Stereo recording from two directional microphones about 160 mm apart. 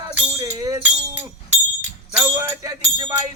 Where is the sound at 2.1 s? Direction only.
5° right (ahead or behind).